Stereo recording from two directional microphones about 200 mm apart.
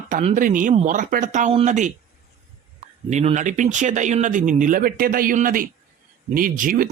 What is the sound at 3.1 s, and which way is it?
Speech, 35° right (ahead or behind).